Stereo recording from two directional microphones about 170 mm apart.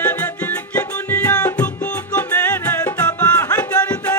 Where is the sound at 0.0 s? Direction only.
10° left (ahead or behind).